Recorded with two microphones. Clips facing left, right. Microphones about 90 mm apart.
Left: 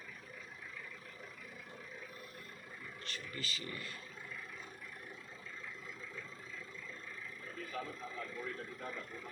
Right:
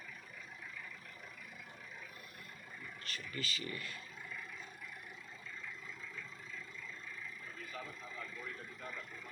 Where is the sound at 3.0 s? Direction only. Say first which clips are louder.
Right 2 dB; 30° left (ahead or behind).